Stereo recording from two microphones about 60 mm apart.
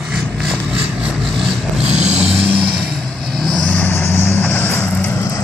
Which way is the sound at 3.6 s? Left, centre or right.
Centre.